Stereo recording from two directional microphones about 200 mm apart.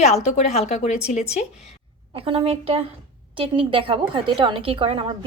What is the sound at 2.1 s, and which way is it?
A woman's voice, 25° right (ahead or behind).